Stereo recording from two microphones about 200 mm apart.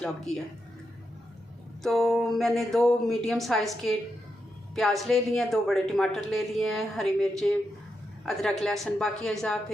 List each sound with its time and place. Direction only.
1.8 s speech: centre (ahead or behind)